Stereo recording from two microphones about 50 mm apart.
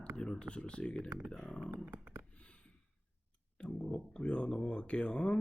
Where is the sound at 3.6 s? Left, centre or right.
Left.